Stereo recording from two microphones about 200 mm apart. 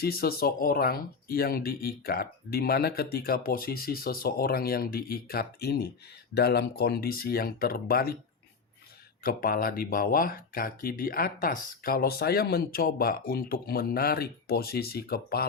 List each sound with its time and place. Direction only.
0.0 s speech: 50° left (ahead or behind)
9.2 s speech: 45° left (ahead or behind)